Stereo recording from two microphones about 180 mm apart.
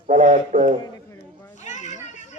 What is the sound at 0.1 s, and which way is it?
Speech, 45° right (ahead or behind).